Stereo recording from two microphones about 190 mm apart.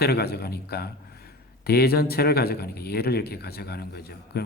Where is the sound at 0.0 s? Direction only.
55° left (ahead or behind).